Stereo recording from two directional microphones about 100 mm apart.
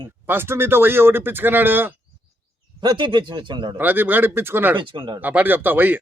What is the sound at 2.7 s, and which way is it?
A man's voice, 50° right (ahead or behind).